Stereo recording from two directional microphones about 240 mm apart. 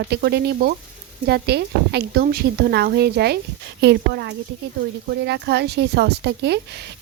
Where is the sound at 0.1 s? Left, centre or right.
Right.